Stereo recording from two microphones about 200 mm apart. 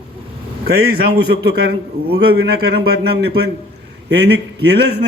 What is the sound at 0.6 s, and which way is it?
A man's voice, 55° right (ahead or behind).